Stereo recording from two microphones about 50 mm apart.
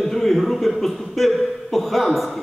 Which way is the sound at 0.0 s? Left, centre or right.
Centre.